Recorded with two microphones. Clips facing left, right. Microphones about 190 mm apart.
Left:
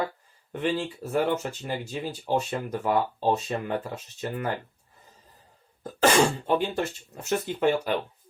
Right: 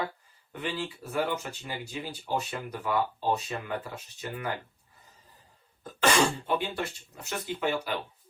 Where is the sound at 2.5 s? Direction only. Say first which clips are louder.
Left 5 dB; 45° left (ahead or behind).